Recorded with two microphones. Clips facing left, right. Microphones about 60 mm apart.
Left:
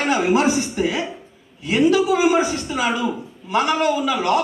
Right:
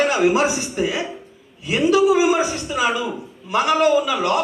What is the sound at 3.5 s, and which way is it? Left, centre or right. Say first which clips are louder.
Speech: right 1 dB; centre.